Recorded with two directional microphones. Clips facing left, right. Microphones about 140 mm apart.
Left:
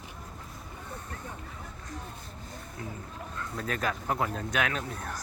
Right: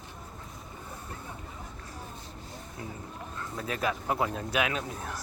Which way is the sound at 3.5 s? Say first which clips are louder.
Right 1 dB; 5° right (ahead or behind).